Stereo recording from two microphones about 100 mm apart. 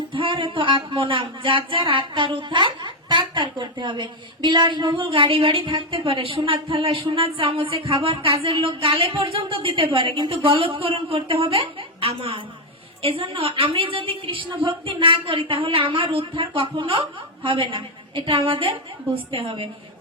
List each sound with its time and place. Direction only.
0.1 s speech: 60° right (ahead or behind)